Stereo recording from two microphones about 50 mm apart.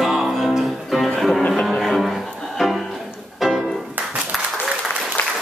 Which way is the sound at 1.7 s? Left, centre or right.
Centre.